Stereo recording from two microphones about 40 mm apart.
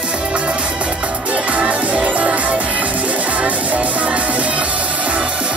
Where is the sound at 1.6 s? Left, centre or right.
Right.